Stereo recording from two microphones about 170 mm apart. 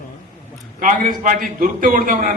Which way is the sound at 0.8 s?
50° right (ahead or behind).